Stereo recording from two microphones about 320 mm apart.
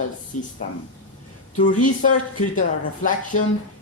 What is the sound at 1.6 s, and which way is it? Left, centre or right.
Speech, left.